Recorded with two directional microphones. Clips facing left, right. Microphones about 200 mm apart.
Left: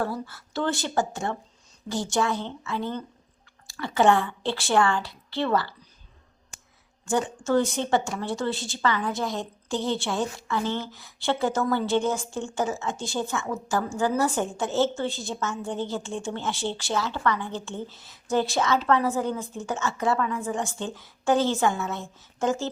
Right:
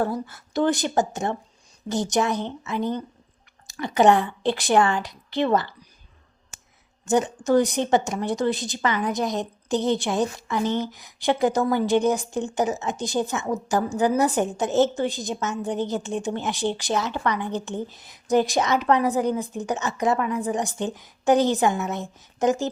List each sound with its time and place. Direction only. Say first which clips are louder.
0.0 s a woman's voice: right 4 dB; 20° right (ahead or behind)
7.0 s a woman's voice: right 4 dB; 20° right (ahead or behind)